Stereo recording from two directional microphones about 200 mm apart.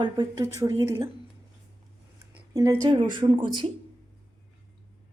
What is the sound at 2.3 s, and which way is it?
Speech, 15° right (ahead or behind).